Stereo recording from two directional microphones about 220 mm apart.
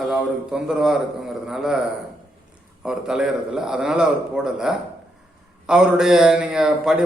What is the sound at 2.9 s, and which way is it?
A man's voice, 5° right (ahead or behind).